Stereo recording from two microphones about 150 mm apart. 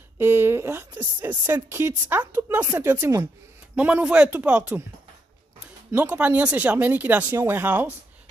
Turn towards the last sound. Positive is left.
turn(degrees=-10)  # may be behind; listen again after turning